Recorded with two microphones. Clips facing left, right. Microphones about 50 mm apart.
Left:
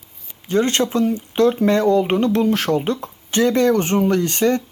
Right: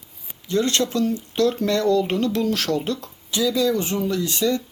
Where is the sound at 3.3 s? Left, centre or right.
Left.